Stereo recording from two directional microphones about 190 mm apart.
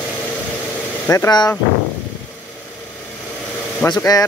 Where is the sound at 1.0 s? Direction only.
15° left (ahead or behind).